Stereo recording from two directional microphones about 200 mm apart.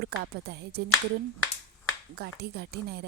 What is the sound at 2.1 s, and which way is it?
Speech, 55° right (ahead or behind).